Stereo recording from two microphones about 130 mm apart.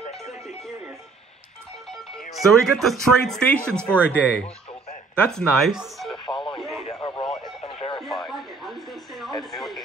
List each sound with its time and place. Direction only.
2.3 s speech: centre (ahead or behind)
6.2 s radio: 40° left (ahead or behind)
8.0 s a sound: centre (ahead or behind)